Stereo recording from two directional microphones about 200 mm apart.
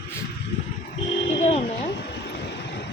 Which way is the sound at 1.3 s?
35° left (ahead or behind).